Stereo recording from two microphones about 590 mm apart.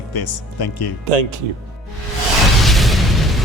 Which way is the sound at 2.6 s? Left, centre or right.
Centre.